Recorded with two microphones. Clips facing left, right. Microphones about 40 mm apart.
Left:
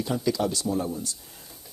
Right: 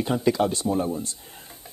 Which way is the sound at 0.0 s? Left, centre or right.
Right.